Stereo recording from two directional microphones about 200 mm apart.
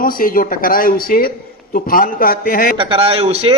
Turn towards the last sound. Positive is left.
turn(degrees=-30)  # may be behind; listen again after turning